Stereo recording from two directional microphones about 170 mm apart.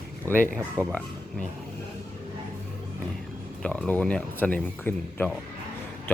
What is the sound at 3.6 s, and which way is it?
Speech, 5° left (ahead or behind).